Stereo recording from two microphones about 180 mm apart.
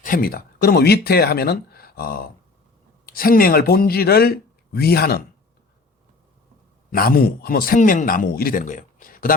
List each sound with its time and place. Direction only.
0.0 s speech: 50° left (ahead or behind)
6.9 s a man's voice: 55° left (ahead or behind)